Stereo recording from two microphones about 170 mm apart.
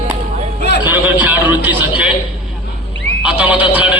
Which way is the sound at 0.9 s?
10° right (ahead or behind).